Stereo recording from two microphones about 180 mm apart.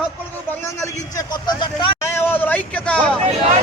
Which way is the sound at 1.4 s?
25° left (ahead or behind).